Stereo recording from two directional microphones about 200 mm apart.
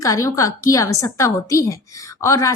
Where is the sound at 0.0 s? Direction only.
15° left (ahead or behind).